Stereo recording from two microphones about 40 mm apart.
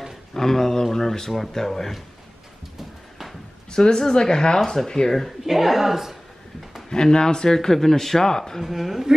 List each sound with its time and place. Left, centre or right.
0.3 s speech: centre
3.7 s speech: centre
5.4 s a woman's voice: centre
6.9 s speech: centre
8.6 s a woman's voice: centre